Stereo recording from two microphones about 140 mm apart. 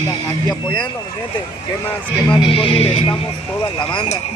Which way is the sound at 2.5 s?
40° left (ahead or behind).